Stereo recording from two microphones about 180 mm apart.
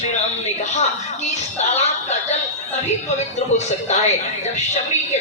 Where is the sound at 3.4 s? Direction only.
40° left (ahead or behind).